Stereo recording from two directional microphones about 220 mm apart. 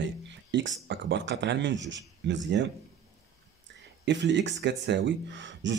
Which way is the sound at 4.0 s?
55° right (ahead or behind).